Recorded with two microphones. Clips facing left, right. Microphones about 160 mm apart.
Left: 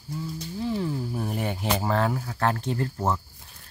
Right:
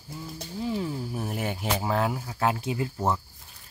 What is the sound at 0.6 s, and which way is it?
Speech, 5° right (ahead or behind).